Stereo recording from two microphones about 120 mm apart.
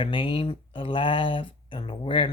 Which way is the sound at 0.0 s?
45° left (ahead or behind).